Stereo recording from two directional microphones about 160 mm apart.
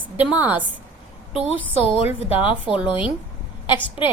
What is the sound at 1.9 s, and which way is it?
A woman's voice, 10° right (ahead or behind).